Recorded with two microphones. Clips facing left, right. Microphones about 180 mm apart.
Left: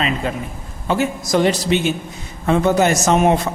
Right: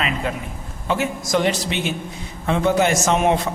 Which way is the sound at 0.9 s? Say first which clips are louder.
Left 3 dB; 35° left (ahead or behind).